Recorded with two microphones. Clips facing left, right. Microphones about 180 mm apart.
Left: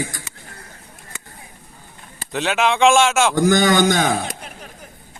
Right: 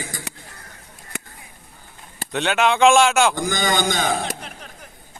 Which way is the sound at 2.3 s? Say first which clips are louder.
Even; centre (ahead or behind).